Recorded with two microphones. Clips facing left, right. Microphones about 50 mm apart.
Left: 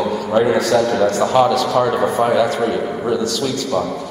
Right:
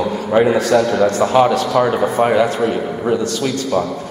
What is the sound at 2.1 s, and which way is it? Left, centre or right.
Speech, right.